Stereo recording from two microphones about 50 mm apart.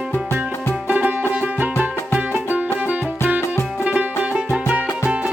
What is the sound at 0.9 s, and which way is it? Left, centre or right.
Music, right.